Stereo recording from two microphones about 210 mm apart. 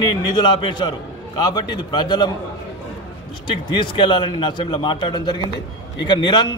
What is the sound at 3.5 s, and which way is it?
A man's voice, 20° left (ahead or behind).